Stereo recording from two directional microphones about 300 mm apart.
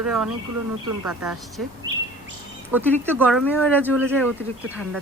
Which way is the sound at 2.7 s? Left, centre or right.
Centre.